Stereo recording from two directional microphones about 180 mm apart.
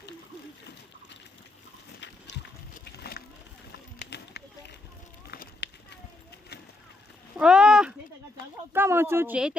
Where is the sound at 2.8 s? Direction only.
65° left (ahead or behind).